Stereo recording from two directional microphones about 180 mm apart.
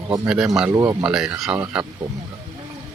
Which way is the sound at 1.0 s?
5° right (ahead or behind).